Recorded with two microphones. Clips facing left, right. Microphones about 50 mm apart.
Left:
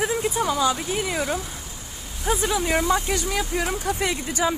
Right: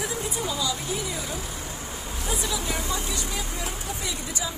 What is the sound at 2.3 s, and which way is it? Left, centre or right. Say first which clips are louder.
Speech: left 8 dB; left.